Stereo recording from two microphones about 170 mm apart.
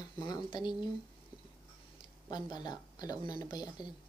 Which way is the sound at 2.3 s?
25° left (ahead or behind).